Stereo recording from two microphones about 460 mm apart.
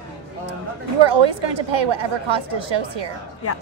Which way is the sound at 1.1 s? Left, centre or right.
Right.